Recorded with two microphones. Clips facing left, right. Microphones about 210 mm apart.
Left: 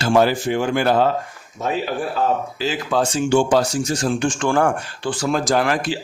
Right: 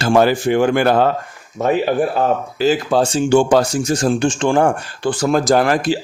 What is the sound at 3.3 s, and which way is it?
Speech, 50° right (ahead or behind).